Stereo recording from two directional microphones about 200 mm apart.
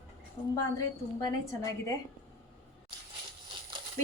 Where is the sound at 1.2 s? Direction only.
15° left (ahead or behind).